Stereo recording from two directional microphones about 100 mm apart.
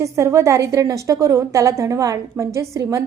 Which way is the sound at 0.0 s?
30° right (ahead or behind).